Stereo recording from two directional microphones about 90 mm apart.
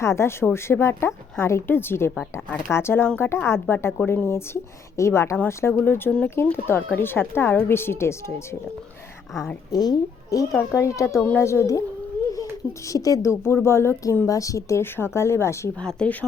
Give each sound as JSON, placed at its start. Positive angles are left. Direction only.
{"t": 0.0, "sound": "speech", "side_deg": 30}
{"t": 6.1, "sound": "speech", "side_deg": 10}
{"t": 6.3, "sound": "speech", "side_deg": 25}
{"t": 9.7, "sound": "speech", "side_deg": 45}
{"t": 15.8, "sound": "speech", "side_deg": 10}